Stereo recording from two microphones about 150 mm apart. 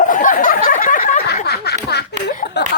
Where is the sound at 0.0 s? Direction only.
60° left (ahead or behind).